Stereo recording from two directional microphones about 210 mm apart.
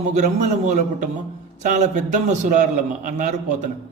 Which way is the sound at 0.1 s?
35° right (ahead or behind).